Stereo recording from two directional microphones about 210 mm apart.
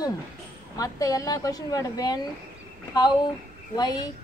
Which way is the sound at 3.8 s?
20° left (ahead or behind).